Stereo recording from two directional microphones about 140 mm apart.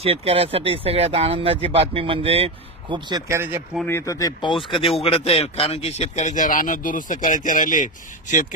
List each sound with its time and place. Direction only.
0.0 s speech: 45° right (ahead or behind)
3.3 s speech: 20° right (ahead or behind)
3.8 s speech: 20° left (ahead or behind); by 8.5 s 65° left (ahead or behind)